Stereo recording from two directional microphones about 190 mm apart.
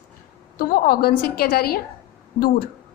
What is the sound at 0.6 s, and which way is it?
Speech, 50° left (ahead or behind).